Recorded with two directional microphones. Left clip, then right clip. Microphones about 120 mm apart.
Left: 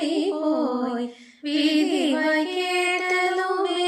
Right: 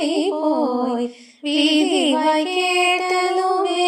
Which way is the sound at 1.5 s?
50° right (ahead or behind).